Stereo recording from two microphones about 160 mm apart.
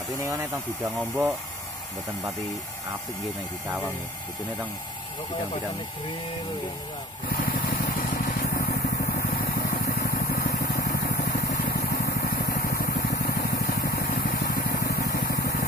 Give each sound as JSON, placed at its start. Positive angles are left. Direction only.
{"t": 7.2, "sound": "vehicle", "side_deg": 60}